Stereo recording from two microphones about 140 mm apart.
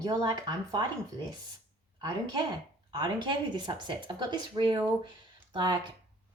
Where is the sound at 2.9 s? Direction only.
35° right (ahead or behind).